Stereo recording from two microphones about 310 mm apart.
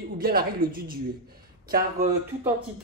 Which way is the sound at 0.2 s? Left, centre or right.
Right.